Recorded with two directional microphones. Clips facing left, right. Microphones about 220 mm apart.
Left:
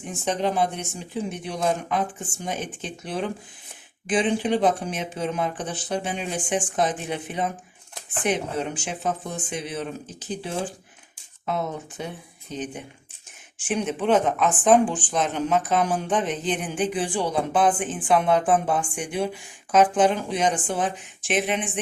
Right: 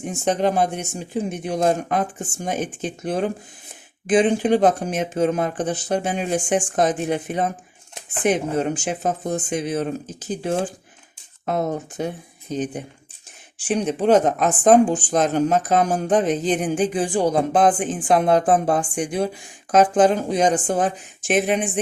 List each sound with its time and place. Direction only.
0.1 s speech: 45° right (ahead or behind)